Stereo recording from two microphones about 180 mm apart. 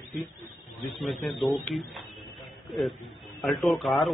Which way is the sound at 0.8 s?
Centre (ahead or behind).